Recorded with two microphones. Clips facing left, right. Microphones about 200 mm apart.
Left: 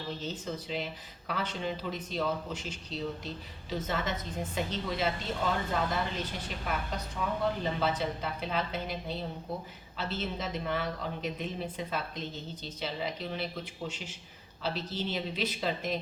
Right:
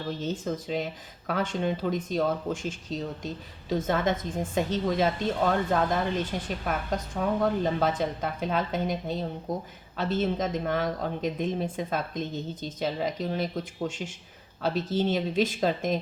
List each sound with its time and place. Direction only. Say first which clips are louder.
0.2 s a woman's voice: right 6 dB; 50° right (ahead or behind)